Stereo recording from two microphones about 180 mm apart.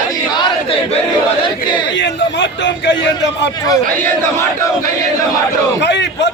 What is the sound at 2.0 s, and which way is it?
Speech, 80° left.